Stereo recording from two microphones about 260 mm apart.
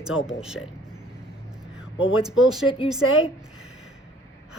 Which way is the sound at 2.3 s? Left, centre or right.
Centre.